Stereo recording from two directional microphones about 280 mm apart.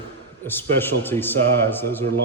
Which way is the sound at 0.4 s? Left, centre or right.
Centre.